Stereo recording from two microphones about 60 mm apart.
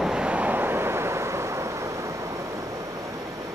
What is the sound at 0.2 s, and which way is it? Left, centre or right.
Vehicle, right.